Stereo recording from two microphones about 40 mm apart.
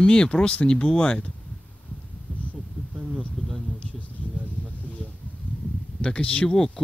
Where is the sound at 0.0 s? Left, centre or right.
Left.